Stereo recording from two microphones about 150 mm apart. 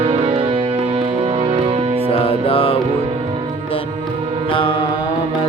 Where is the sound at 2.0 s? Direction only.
40° left (ahead or behind).